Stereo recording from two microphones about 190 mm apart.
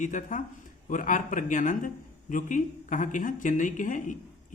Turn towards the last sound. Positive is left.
turn(degrees=45)  # may be behind; listen again after turning